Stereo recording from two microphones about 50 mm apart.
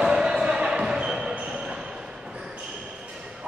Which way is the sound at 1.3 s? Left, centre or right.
Right.